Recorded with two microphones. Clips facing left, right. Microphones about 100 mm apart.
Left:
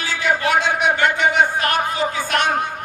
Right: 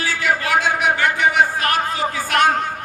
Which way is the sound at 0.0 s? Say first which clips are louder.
Left 1 dB; 20° left (ahead or behind).